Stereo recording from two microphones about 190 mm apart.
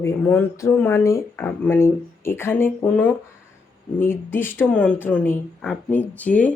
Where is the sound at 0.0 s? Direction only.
10° left (ahead or behind).